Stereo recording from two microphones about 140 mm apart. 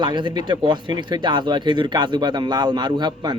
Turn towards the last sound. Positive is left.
turn(degrees=-30)  # may be behind; listen again after turning